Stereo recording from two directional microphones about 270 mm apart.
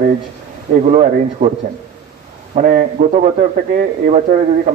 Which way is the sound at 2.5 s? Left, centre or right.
Right.